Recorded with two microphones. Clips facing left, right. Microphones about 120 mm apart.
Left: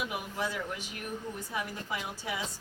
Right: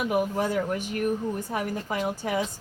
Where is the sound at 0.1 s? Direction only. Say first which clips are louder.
Right 10 dB; 45° right (ahead or behind).